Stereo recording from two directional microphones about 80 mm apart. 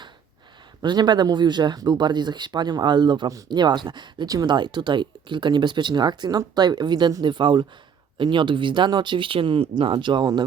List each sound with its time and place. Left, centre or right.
0.8 s speech: right
8.2 s speech: right